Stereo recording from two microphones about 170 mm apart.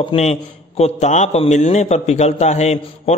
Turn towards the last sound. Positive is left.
turn(degrees=40)  # may be behind; listen again after turning